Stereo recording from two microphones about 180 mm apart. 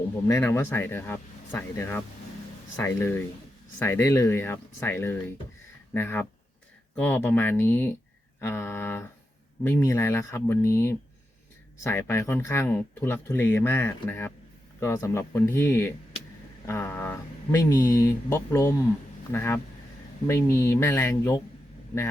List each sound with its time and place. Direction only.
0.5 s speech: 10° left (ahead or behind)